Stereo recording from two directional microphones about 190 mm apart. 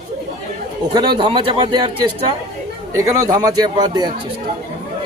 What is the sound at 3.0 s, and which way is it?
A man's voice, 20° right (ahead or behind).